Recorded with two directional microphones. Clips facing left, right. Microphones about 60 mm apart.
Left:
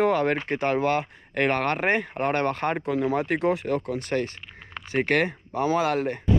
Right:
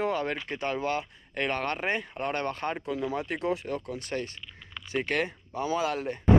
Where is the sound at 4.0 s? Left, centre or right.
Left.